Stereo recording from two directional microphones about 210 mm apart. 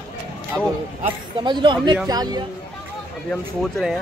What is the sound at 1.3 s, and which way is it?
Speech, 20° right (ahead or behind).